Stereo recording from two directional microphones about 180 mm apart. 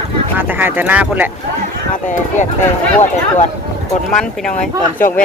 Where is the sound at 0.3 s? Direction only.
10° right (ahead or behind).